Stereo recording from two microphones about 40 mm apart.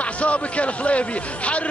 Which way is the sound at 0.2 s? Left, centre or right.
Left.